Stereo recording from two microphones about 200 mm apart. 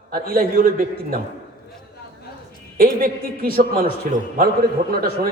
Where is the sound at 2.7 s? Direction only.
45° right (ahead or behind).